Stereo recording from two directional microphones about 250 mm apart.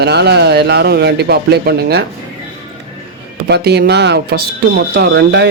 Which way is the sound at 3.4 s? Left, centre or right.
Right.